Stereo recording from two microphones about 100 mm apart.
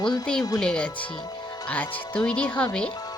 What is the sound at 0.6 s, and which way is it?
Speech, 10° left (ahead or behind).